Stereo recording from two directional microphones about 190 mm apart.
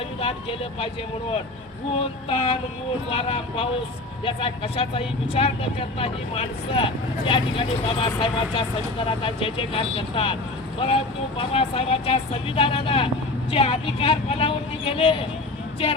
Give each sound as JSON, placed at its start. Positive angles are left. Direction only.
{"t": 0.2, "sound": "speech", "side_deg": 30}
{"t": 2.3, "sound": "speech", "side_deg": 35}